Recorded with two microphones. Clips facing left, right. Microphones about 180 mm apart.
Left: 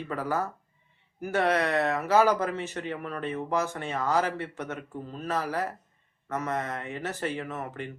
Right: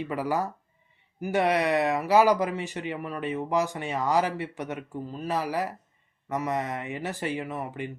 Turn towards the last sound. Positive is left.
turn(degrees=-15)  # may be behind; listen again after turning